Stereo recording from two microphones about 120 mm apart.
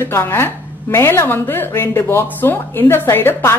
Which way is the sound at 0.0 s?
20° left (ahead or behind).